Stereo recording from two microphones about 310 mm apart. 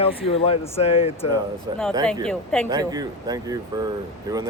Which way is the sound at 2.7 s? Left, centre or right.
Centre.